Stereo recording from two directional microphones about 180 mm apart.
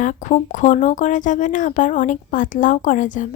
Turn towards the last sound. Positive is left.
turn(degrees=45)  # may be behind; listen again after turning